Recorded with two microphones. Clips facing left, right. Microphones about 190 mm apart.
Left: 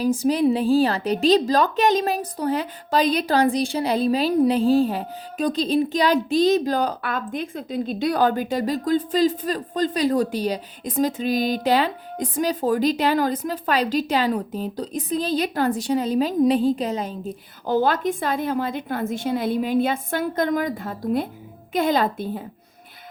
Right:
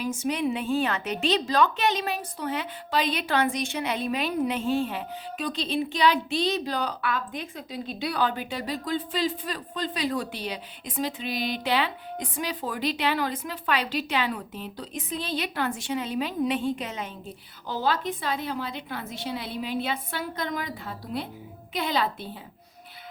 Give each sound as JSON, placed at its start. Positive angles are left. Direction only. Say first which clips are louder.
{"t": 0.0, "sound": "a woman's voice", "louder": "left 8 dB", "side_deg": 35}